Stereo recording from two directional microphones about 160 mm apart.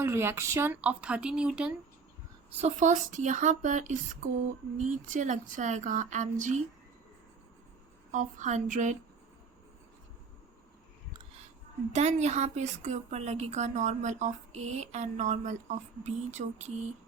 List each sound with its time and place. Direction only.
0.0 s speech: 15° right (ahead or behind)
2.6 s a woman's voice: 45° right (ahead or behind)
8.1 s a woman's voice: 50° right (ahead or behind)
11.9 s a woman's voice: 45° right (ahead or behind)